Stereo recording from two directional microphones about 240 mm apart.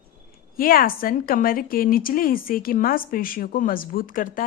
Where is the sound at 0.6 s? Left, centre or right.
Left.